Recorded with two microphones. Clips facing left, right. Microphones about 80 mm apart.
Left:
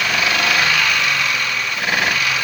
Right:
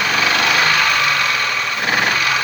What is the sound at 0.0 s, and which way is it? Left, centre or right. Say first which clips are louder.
Jackhammer: right 2 dB; right.